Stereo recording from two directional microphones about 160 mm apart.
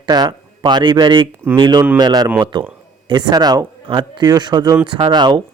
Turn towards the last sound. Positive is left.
turn(degrees=-25)  # may be behind; listen again after turning